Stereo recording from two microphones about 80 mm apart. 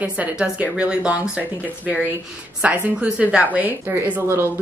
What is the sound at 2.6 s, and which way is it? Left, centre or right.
A woman's voice, centre.